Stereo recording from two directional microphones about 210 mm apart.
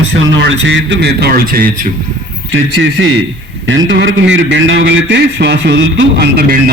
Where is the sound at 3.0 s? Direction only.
65° right (ahead or behind).